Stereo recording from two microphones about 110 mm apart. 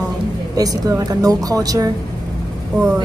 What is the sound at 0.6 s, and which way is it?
Speech, 35° right (ahead or behind).